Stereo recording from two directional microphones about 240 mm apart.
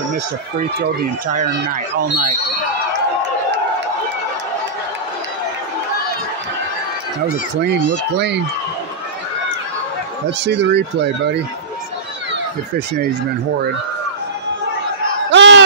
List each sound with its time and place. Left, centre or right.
0.7 s speech: right
10.4 s speech: right
15.3 s a sound: right